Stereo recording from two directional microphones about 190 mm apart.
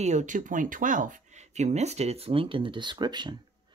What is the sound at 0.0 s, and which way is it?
Speech, 40° right (ahead or behind).